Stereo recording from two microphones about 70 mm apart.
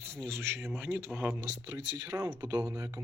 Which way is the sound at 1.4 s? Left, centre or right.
Right.